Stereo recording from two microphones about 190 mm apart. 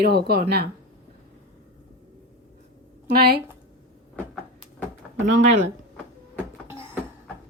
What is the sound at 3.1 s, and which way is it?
Speech, 55° right (ahead or behind).